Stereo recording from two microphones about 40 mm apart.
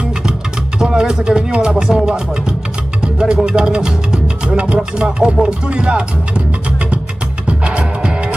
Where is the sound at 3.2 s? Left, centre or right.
Centre.